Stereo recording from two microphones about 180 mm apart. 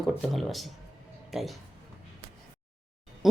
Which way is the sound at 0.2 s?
Centre (ahead or behind).